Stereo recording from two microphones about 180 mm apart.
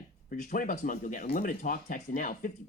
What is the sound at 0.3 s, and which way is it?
Speech, 50° left (ahead or behind).